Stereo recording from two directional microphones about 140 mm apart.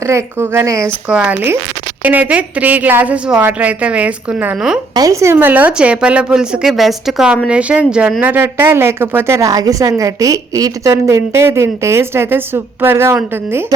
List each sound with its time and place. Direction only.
0.0 s a woman's voice: 20° right (ahead or behind)
1.0 s speech: 10° right (ahead or behind)
4.9 s speech: 25° right (ahead or behind)